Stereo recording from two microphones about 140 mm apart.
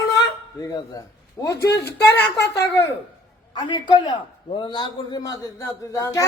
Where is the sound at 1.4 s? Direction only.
25° left (ahead or behind).